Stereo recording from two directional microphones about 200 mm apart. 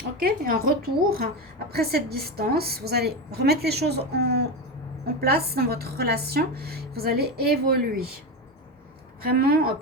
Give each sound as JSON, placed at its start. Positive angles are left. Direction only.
{"t": 0.2, "sound": "speech", "side_deg": -50}
{"t": 9.2, "sound": "speech", "side_deg": -50}